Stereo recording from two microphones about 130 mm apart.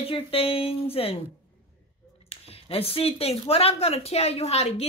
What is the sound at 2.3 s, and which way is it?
Speech, 50° left (ahead or behind).